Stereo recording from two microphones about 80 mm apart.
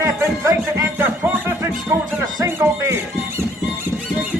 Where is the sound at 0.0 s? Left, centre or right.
Right.